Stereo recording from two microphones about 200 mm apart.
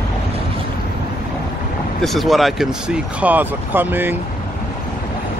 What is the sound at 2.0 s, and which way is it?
Speech, centre (ahead or behind).